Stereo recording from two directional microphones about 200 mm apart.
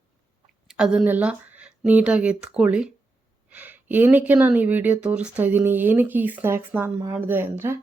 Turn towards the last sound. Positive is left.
turn(degrees=-10)  # may be behind; listen again after turning